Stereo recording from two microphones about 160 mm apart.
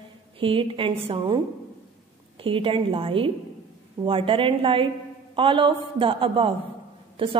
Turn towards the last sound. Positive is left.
turn(degrees=-35)  # may be behind; listen again after turning